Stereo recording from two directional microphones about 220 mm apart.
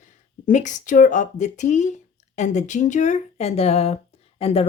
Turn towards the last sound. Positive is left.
turn(degrees=25)  # may be behind; listen again after turning